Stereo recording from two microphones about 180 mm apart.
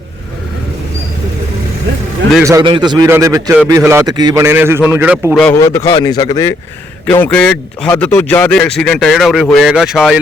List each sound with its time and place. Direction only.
2.4 s a man's voice: 20° right (ahead or behind); by 5.5 s 5° right (ahead or behind)
5.5 s speech: 15° left (ahead or behind)
7.1 s speech: 10° left (ahead or behind)